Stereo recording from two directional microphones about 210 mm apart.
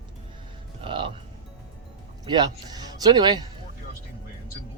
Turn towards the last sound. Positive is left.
turn(degrees=-20)  # may be behind; listen again after turning